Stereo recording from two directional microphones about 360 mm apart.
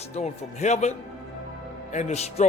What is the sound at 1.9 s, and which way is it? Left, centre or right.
Speech, centre.